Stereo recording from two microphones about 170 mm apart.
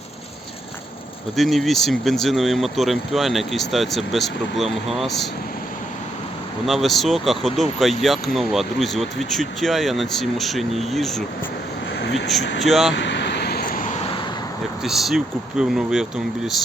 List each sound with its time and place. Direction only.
1.4 s speech: centre (ahead or behind)
6.7 s speech: centre (ahead or behind)
11.9 s speech: 90° left
12.6 s speech: centre (ahead or behind)
12.9 s vehicle: 90° left; by 14.0 s 50° left (ahead or behind)
14.8 s speech: centre (ahead or behind)